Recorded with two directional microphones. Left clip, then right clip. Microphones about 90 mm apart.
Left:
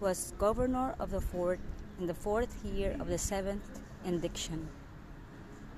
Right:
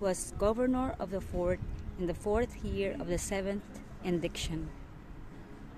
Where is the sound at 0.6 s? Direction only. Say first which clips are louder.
Right 1 dB; 55° right (ahead or behind).